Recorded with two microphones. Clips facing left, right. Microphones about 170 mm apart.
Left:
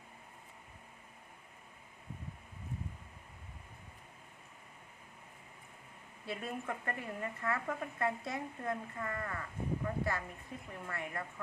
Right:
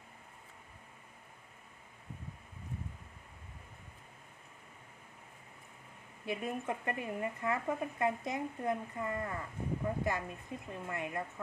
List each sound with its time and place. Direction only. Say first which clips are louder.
6.2 s speech: right 3 dB; 20° right (ahead or behind)